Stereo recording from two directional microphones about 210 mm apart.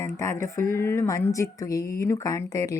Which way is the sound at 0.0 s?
15° left (ahead or behind).